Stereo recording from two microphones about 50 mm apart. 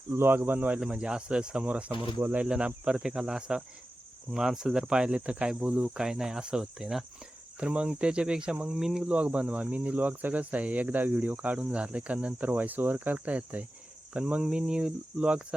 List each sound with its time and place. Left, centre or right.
0.1 s speech: right
0.9 s speech: centre
1.6 s cricket: right
2.5 s speech: right
6.0 s speech: centre
7.6 s cricket: right
8.7 s speech: centre
9.0 s speech: right
11.5 s cricket: right
13.1 s cricket: right
14.4 s speech: centre